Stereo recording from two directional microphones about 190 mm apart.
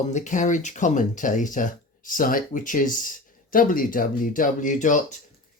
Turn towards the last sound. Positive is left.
turn(degrees=40)  # may be behind; listen again after turning